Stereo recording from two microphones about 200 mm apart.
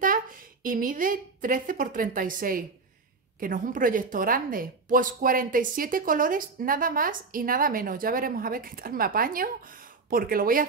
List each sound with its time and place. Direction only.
0.7 s a woman's voice: 45° right (ahead or behind)